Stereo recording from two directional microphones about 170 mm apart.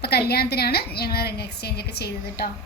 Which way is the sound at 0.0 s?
70° left (ahead or behind).